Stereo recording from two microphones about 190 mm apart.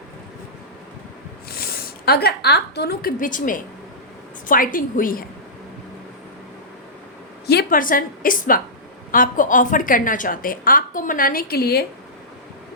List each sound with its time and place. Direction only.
1.5 s a woman's voice: 55° left (ahead or behind)
7.4 s a woman's voice: 55° left (ahead or behind)